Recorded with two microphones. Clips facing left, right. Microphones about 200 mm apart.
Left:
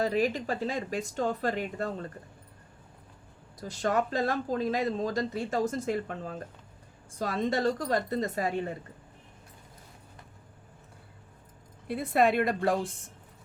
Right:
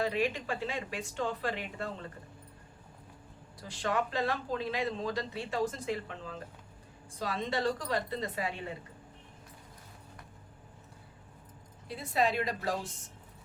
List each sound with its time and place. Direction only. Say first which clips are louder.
0.0 s speech: left 4 dB; 40° left (ahead or behind)
3.6 s speech: left 4 dB; 45° left (ahead or behind)
11.9 s a woman's voice: left 6 dB; 55° left (ahead or behind)